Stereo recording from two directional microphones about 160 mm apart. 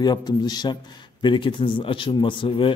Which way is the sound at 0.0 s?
25° left (ahead or behind).